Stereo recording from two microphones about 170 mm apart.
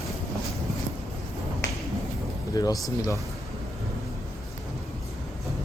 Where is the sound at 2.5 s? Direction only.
20° left (ahead or behind).